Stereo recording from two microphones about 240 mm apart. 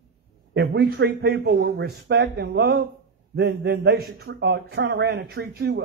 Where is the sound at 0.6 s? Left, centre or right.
Right.